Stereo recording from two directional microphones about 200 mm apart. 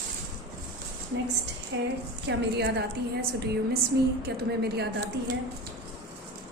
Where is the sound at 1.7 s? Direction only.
65° right (ahead or behind).